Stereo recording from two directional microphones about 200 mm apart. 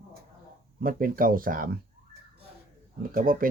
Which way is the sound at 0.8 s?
45° right (ahead or behind).